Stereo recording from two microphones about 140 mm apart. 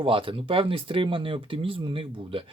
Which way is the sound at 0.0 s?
40° right (ahead or behind).